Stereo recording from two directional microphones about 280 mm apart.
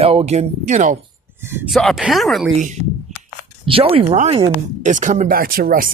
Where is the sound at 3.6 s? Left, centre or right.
Centre.